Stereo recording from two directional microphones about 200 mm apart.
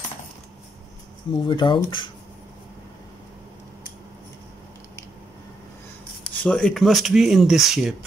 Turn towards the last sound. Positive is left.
turn(degrees=0)  # may be behind; listen again after turning